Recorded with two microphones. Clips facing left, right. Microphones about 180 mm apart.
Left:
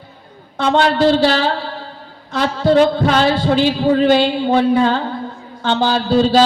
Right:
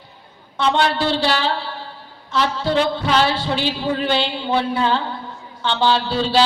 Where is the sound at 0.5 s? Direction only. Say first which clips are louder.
Left 4 dB; 45° left (ahead or behind).